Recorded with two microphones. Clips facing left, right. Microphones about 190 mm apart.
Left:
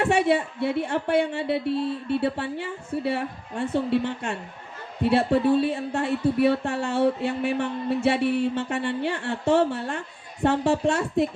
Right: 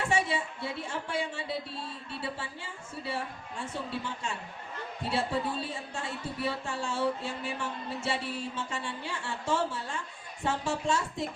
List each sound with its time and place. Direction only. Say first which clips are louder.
0.0 s a woman's voice: left 9 dB; 65° left (ahead or behind)